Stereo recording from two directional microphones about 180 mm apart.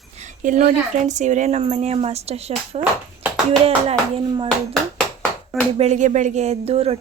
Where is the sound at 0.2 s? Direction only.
40° right (ahead or behind).